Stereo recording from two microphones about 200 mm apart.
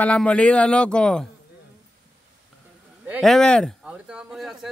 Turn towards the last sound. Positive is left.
turn(degrees=-5)  # may be behind; listen again after turning